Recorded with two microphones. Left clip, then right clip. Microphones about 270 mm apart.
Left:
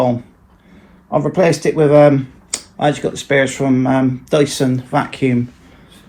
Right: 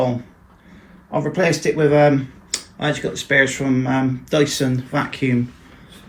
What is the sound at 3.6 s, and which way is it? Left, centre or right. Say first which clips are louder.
Speech: left 5 dB; left.